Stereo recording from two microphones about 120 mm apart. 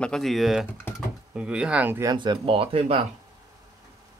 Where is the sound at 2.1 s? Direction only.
45° right (ahead or behind).